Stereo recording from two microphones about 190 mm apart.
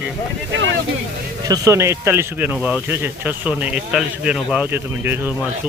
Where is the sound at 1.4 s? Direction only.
20° right (ahead or behind).